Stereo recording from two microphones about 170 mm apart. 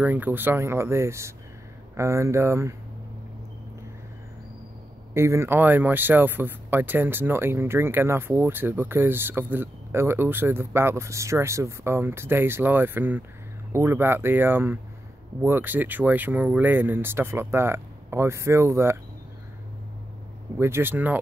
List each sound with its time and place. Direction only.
0.0 s speech: 10° right (ahead or behind)
5.1 s speech: 15° right (ahead or behind)
20.5 s speech: 15° right (ahead or behind)